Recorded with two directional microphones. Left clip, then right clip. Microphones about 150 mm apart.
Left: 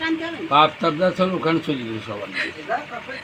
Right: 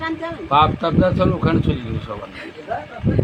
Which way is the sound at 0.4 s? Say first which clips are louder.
Right 1 dB; 40° right (ahead or behind).